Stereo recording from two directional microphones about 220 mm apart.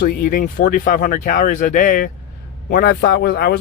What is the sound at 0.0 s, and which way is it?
Speech, 40° left (ahead or behind).